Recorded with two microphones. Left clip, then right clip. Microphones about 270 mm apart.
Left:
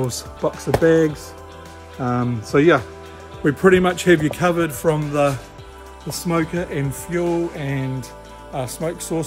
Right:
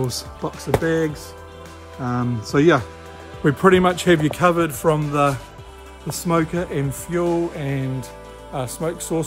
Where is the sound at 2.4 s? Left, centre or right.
Right.